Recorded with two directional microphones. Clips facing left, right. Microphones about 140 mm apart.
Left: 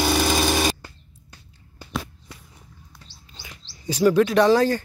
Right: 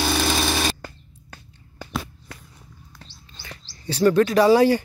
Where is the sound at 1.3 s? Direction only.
60° right (ahead or behind).